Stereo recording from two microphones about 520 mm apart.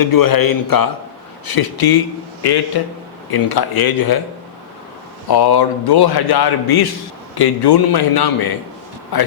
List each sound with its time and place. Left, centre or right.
0.0 s a man's voice: left
5.3 s a man's voice: left